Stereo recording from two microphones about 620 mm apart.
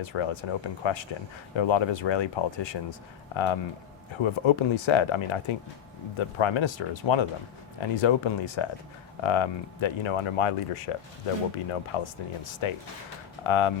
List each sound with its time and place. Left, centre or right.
0.0 s speech: left